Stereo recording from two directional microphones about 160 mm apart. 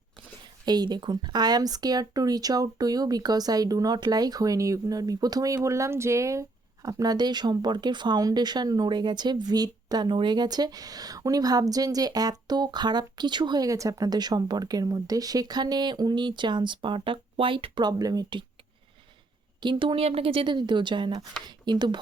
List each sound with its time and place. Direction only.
0.4 s speech: 25° right (ahead or behind)
19.5 s speech: 30° right (ahead or behind)